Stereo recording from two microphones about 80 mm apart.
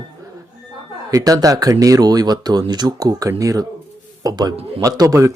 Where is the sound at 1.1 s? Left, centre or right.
Right.